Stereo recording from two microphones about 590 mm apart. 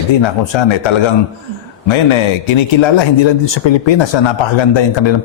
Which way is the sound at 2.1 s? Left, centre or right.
Left.